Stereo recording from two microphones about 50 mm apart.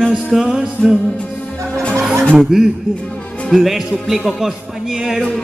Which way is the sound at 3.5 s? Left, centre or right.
Centre.